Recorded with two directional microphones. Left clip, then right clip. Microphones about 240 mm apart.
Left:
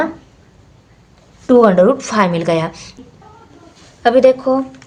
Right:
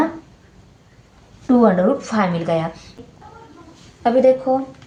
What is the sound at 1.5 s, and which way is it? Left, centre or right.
Speech, left.